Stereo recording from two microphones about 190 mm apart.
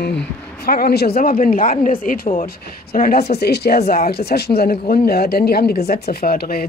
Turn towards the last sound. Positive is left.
turn(degrees=50)  # may be behind; listen again after turning